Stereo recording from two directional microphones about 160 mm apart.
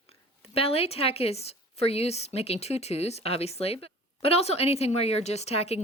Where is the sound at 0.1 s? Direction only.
35° left (ahead or behind).